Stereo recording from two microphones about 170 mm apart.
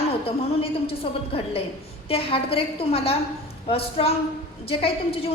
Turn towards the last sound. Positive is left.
turn(degrees=35)  # may be behind; listen again after turning